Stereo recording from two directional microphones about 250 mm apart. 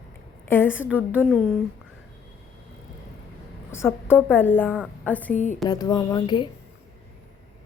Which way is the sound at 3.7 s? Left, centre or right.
Centre.